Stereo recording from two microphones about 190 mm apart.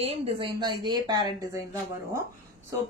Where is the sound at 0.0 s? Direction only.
30° right (ahead or behind).